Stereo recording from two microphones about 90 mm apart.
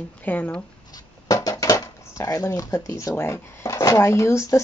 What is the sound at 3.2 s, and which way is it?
Speech, 30° left (ahead or behind).